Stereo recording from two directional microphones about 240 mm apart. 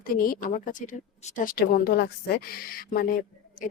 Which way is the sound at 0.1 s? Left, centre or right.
Left.